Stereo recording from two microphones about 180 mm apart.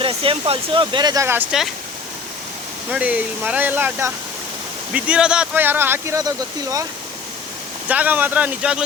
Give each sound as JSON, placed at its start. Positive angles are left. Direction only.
{"t": 0.0, "sound": "speech", "side_deg": -30}
{"t": 2.9, "sound": "speech", "side_deg": -5}
{"t": 7.9, "sound": "speech", "side_deg": -10}